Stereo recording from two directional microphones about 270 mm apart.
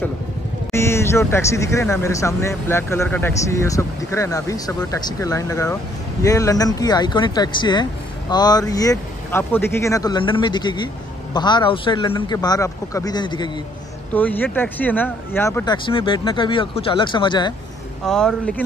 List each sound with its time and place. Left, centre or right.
0.7 s speech: centre
18.0 s speech: centre